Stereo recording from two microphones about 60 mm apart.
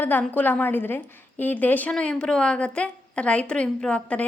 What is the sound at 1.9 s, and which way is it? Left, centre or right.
A woman's voice, centre.